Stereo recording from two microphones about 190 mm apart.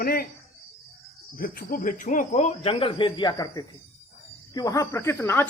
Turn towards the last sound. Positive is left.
turn(degrees=10)  # may be behind; listen again after turning